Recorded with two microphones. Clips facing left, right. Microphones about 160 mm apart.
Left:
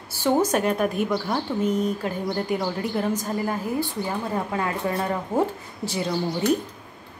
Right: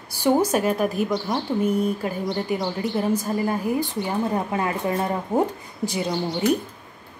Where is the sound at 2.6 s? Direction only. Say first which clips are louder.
Right 1 dB; 5° left (ahead or behind).